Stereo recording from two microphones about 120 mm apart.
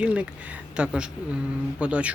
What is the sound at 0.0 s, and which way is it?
Speech, 10° right (ahead or behind).